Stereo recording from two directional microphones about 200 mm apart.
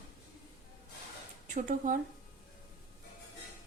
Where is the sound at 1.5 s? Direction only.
40° right (ahead or behind).